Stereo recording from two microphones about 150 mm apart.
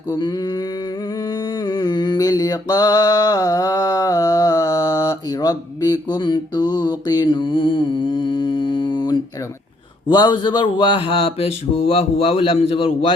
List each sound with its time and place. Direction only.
0.1 s mantra: 25° left (ahead or behind)
10.1 s speech: 30° left (ahead or behind)